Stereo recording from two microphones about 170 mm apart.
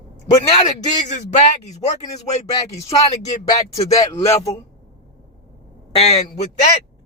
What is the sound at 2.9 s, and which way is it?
Speech, 30° left (ahead or behind).